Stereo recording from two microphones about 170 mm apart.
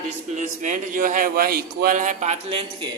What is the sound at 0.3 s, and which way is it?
A man's voice, 45° right (ahead or behind).